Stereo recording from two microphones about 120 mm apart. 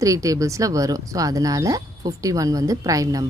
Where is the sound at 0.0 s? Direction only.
25° right (ahead or behind).